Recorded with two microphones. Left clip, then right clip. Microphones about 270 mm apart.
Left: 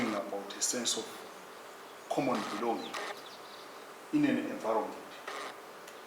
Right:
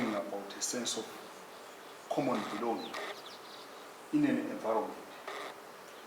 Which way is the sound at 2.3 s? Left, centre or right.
Right.